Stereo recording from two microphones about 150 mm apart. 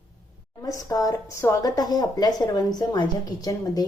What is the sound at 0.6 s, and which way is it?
Speech, 25° left (ahead or behind).